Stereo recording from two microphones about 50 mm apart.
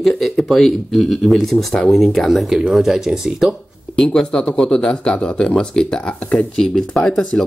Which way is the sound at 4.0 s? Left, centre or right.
Centre.